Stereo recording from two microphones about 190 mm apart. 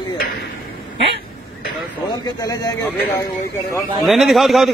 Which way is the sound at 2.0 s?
20° left (ahead or behind).